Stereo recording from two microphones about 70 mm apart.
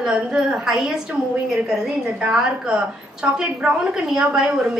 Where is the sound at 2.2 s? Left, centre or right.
Centre.